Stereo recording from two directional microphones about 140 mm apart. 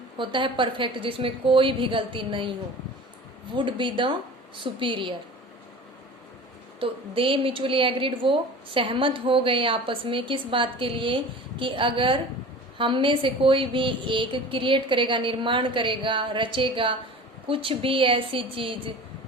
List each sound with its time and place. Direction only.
0.2 s a woman's voice: 35° right (ahead or behind)
6.7 s a woman's voice: 40° right (ahead or behind)